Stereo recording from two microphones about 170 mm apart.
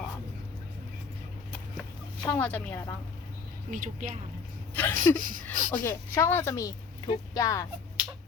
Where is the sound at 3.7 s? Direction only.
50° right (ahead or behind).